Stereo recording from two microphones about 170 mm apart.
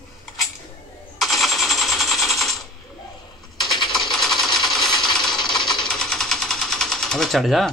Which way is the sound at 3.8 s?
25° left (ahead or behind).